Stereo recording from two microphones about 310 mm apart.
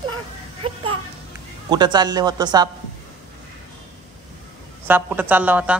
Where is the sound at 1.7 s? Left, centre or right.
Centre.